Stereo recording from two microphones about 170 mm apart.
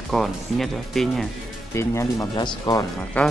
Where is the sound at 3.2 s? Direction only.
10° left (ahead or behind).